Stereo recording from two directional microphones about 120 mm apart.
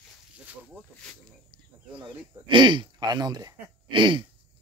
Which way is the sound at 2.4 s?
40° right (ahead or behind).